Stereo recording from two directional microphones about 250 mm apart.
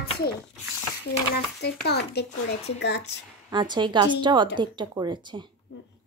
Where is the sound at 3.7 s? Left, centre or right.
Centre.